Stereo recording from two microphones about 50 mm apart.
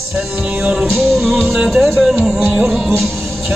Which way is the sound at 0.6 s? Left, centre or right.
Centre.